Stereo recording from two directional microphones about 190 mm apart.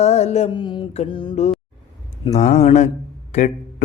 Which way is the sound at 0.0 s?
35° left (ahead or behind).